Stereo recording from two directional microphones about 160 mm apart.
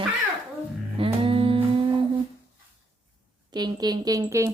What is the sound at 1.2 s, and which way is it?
Humming, 35° right (ahead or behind).